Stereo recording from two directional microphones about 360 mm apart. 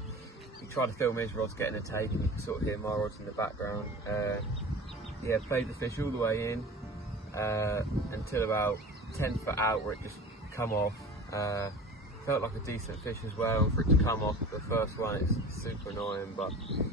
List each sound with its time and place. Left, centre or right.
0.7 s speech: centre